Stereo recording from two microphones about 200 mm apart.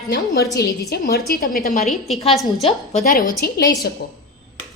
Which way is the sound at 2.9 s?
40° left (ahead or behind).